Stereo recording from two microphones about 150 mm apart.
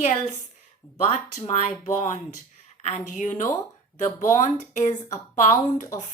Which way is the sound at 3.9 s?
60° left (ahead or behind).